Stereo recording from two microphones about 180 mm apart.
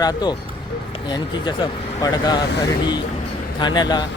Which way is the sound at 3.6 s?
25° left (ahead or behind).